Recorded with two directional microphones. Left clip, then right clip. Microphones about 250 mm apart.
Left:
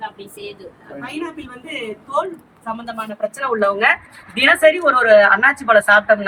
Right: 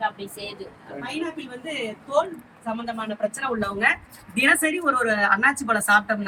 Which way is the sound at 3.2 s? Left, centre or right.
Left.